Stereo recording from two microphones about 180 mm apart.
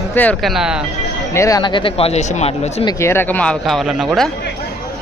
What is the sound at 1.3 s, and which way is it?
Speech, 20° left (ahead or behind).